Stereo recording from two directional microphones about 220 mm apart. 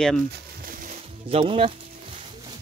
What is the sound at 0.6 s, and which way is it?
Music, 40° right (ahead or behind).